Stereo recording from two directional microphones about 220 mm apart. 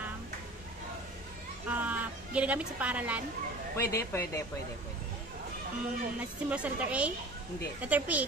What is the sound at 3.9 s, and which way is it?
Speech, 15° left (ahead or behind).